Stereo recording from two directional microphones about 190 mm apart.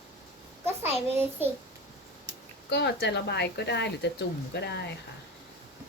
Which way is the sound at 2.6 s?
65° left (ahead or behind).